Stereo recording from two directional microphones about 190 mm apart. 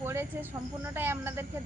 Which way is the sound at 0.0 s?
10° right (ahead or behind).